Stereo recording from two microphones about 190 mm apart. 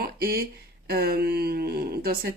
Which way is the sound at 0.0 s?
50° right (ahead or behind).